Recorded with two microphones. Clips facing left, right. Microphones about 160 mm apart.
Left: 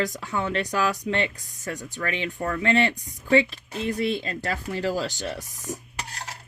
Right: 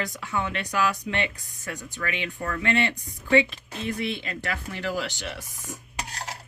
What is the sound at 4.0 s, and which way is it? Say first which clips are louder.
Speech: left 4 dB; 40° left (ahead or behind).